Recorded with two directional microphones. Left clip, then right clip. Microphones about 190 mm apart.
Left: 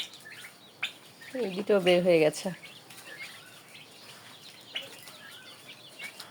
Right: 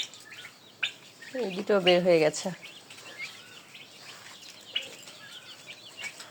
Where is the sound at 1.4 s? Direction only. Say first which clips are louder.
Even; 10° left (ahead or behind).